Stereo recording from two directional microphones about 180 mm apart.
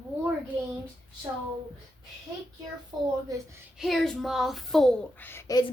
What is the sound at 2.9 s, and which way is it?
Speech, 25° right (ahead or behind).